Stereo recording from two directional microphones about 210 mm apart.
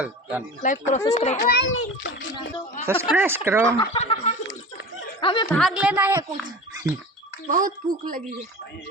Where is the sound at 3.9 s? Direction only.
30° left (ahead or behind).